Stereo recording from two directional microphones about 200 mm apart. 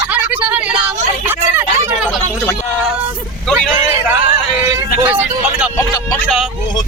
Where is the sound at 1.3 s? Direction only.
10° right (ahead or behind).